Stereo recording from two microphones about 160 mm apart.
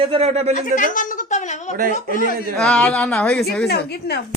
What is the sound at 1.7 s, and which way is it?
Speech, 60° right (ahead or behind).